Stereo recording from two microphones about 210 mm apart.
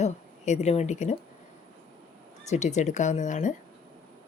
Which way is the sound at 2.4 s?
35° left (ahead or behind).